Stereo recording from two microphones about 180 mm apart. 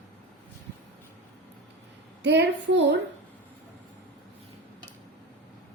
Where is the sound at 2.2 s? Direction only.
70° right (ahead or behind).